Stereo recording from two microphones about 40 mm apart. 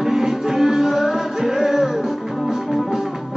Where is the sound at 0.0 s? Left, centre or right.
Centre.